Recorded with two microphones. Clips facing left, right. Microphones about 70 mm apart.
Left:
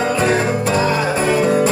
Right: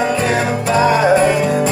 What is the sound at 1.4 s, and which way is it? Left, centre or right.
Music, left.